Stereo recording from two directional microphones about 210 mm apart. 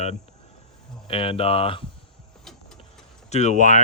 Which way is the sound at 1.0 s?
25° left (ahead or behind).